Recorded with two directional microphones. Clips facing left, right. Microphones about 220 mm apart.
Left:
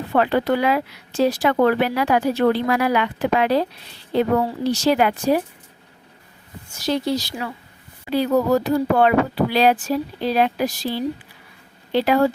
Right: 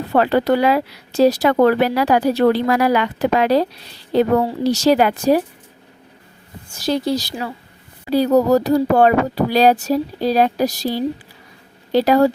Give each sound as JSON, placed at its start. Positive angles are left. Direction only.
{"t": 0.1, "sound": "speech", "side_deg": -40}
{"t": 6.8, "sound": "speech", "side_deg": -40}